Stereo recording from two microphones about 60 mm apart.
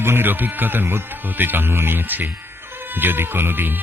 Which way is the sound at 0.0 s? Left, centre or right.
Right.